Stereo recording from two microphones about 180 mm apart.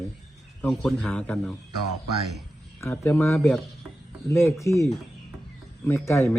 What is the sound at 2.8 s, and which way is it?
A man's voice, 10° left (ahead or behind).